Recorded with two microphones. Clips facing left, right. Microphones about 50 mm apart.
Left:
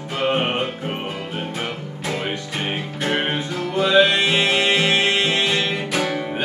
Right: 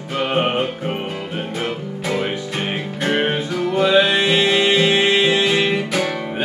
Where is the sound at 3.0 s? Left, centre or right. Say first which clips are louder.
Right 3 dB; centre.